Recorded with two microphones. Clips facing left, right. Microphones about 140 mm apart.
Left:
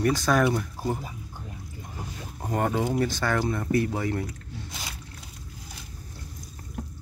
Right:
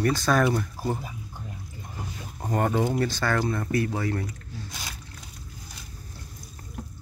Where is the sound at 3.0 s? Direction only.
15° left (ahead or behind).